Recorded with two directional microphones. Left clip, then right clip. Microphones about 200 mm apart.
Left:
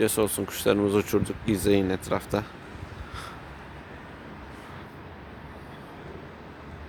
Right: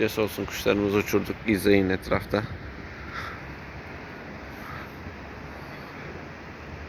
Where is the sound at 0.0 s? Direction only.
30° left (ahead or behind).